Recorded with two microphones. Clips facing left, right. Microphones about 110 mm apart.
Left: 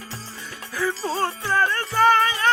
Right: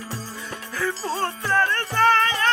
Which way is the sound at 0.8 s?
5° left (ahead or behind).